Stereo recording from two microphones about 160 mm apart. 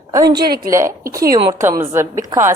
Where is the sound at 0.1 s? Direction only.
20° right (ahead or behind).